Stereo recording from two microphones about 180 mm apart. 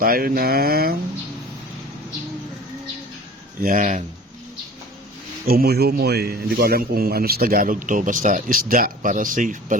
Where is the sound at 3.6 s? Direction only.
50° right (ahead or behind).